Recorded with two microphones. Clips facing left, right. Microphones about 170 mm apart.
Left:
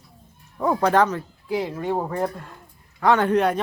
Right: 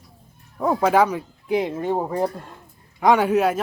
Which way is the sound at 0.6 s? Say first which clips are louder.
Right 1 dB; 5° right (ahead or behind).